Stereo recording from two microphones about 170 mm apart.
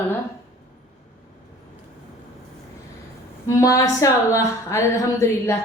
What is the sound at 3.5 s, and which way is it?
A woman's voice, 20° left (ahead or behind).